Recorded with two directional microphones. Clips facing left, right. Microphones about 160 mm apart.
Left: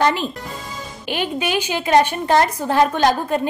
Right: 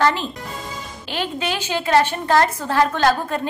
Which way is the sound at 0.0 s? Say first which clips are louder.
Left 1 dB; 15° left (ahead or behind).